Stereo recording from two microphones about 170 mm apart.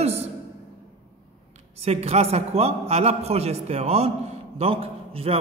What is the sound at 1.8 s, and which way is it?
A man's voice, 40° right (ahead or behind).